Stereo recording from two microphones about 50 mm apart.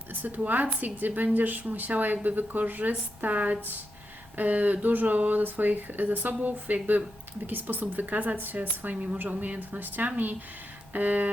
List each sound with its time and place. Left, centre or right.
0.1 s a woman's voice: right